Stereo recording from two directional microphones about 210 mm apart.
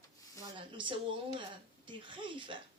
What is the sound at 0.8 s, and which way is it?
Speech, 25° right (ahead or behind).